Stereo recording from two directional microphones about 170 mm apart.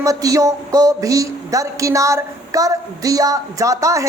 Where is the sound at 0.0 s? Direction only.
20° right (ahead or behind).